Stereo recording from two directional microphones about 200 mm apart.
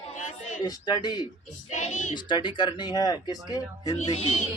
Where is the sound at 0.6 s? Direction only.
20° left (ahead or behind).